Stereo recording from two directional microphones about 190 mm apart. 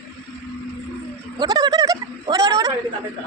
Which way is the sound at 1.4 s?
20° right (ahead or behind).